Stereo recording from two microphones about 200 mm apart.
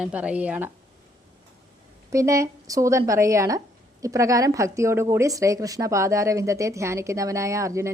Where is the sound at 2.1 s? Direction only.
15° right (ahead or behind).